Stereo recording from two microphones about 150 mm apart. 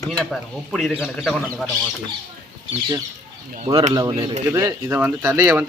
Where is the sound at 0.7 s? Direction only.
5° left (ahead or behind).